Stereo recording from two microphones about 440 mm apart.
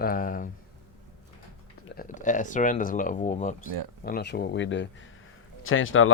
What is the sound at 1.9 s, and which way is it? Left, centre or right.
Speech, centre.